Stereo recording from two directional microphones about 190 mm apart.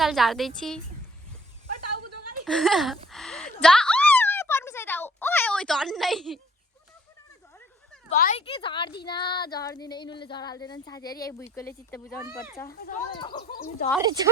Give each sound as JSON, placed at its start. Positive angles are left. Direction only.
{"t": 0.0, "sound": "a woman's voice", "side_deg": 0}
{"t": 2.4, "sound": "a woman's voice", "side_deg": 0}
{"t": 3.1, "sound": "a sound", "side_deg": 0}
{"t": 8.1, "sound": "speech", "side_deg": 45}
{"t": 8.4, "sound": "speech", "side_deg": 30}
{"t": 12.8, "sound": "speech", "side_deg": 55}
{"t": 13.1, "sound": "speech", "side_deg": 25}
{"t": 13.5, "sound": "speech", "side_deg": 50}
{"t": 14.0, "sound": "speech", "side_deg": -20}